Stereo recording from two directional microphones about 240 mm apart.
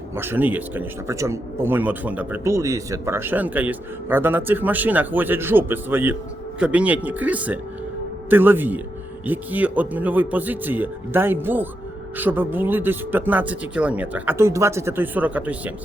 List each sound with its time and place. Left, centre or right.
0.2 s a man's voice: centre